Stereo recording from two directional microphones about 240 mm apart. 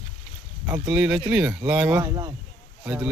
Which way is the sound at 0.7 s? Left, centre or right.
Centre.